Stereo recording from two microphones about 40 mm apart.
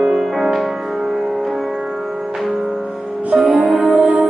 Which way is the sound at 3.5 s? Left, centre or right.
Right.